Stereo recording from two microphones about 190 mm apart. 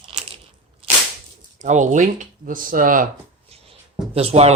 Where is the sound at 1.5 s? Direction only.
40° right (ahead or behind).